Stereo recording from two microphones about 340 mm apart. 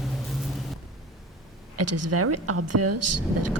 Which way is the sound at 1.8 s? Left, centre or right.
Right.